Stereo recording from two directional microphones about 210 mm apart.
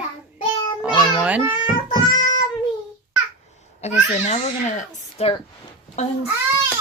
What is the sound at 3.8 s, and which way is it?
Speech, 30° left (ahead or behind).